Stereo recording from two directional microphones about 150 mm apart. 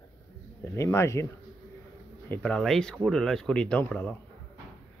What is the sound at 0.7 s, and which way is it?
Speech, 20° left (ahead or behind).